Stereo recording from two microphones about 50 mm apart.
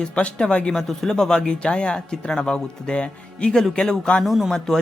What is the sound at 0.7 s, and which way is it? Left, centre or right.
Speech, centre.